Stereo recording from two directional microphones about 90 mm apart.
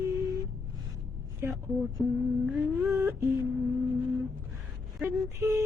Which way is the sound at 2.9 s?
35° right (ahead or behind).